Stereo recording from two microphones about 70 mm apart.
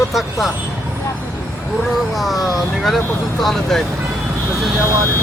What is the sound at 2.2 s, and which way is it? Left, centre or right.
Speech, centre.